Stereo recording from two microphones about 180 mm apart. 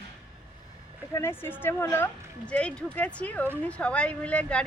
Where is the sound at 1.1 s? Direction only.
15° left (ahead or behind).